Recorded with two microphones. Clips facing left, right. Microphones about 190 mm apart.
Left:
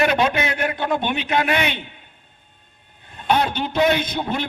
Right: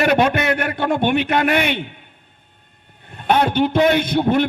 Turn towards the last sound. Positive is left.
turn(degrees=-55)  # may be behind; listen again after turning